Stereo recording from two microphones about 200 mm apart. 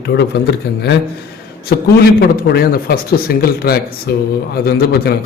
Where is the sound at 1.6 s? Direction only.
50° left (ahead or behind).